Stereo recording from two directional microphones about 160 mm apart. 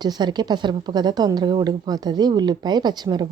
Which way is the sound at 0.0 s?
25° right (ahead or behind).